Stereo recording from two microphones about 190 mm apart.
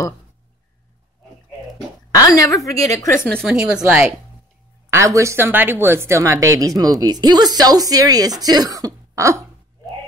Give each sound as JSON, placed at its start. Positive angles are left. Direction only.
{"t": 2.1, "sound": "a woman's voice", "side_deg": 20}
{"t": 3.3, "sound": "speech", "side_deg": 0}